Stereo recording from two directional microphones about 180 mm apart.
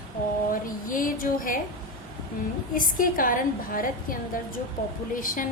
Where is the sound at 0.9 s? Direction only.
50° left (ahead or behind).